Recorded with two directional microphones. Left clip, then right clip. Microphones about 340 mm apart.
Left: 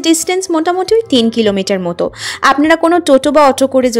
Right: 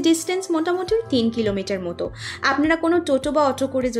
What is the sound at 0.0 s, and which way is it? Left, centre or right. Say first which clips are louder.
A woman's voice: left 7 dB; left.